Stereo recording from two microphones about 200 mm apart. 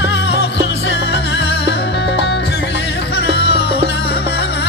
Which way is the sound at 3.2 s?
55° left (ahead or behind).